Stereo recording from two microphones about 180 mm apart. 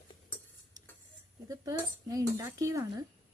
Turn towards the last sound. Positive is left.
turn(degrees=-15)  # may be behind; listen again after turning